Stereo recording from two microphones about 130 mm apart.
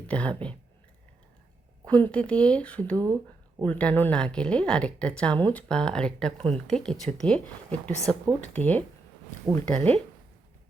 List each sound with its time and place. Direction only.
0.1 s speech: 10° left (ahead or behind)
1.8 s speech: 10° left (ahead or behind)
2.9 s speech: 30° right (ahead or behind)
3.6 s speech: 10° left (ahead or behind)